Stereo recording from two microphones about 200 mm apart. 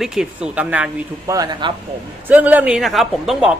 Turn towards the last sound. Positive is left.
turn(degrees=0)  # may be behind; listen again after turning